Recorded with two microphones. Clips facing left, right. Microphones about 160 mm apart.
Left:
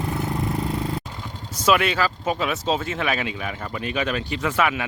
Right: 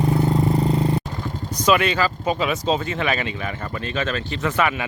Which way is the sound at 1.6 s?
5° left (ahead or behind).